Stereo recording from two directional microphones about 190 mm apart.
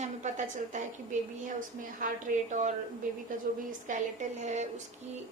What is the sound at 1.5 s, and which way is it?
A woman's voice, 45° right (ahead or behind).